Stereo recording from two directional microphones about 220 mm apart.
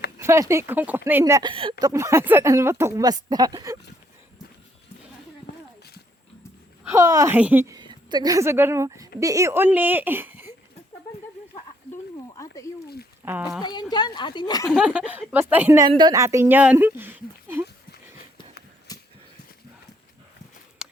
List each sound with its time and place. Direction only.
0.2 s speech: 10° right (ahead or behind)
5.5 s clip-clop: 45° left (ahead or behind)
6.8 s a woman's voice: 15° right (ahead or behind)
12.4 s a sound: 15° left (ahead or behind)
13.2 s speech: 10° right (ahead or behind)
13.6 s speech: 20° left (ahead or behind)
14.7 s speech: 5° right (ahead or behind)
18.9 s a sound: 15° left (ahead or behind)
20.8 s a sound: 5° right (ahead or behind)